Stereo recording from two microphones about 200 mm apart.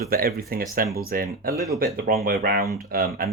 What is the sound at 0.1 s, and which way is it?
Speech, 50° right (ahead or behind).